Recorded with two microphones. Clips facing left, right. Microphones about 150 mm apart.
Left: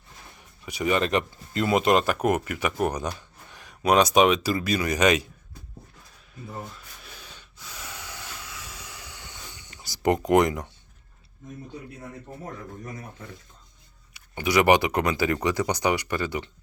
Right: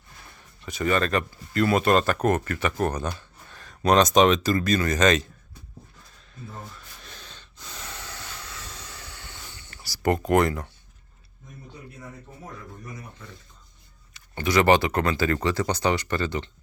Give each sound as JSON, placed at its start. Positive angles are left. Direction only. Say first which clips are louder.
{"t": 0.3, "sound": "speech", "louder": "right 1 dB", "side_deg": 15}
{"t": 6.5, "sound": "gasp", "louder": "left 5 dB", "side_deg": 10}
{"t": 12.8, "sound": "speech", "louder": "left 2 dB", "side_deg": 55}
{"t": 14.1, "sound": "speech", "louder": "even", "side_deg": 10}